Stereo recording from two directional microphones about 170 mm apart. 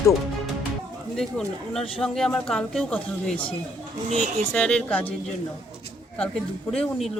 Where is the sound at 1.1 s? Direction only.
Centre (ahead or behind).